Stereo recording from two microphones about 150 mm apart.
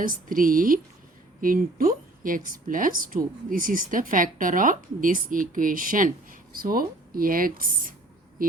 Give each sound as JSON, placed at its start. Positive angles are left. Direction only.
{"t": 0.0, "sound": "a woman's voice", "side_deg": -65}